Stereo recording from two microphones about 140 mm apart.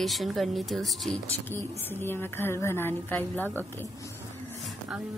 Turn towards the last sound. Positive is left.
turn(degrees=15)  # may be behind; listen again after turning